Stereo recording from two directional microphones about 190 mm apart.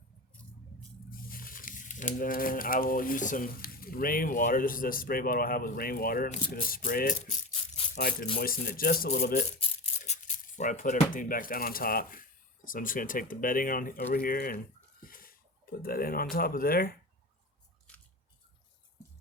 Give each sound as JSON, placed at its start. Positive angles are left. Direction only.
{"t": 1.1, "sound": "speech", "side_deg": 45}
{"t": 9.6, "sound": "speech", "side_deg": 35}
{"t": 15.0, "sound": "a sound", "side_deg": 50}
{"t": 16.3, "sound": "speech", "side_deg": 50}